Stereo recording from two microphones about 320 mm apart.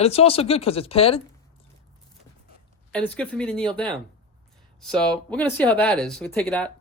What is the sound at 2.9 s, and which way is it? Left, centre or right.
Speech, centre.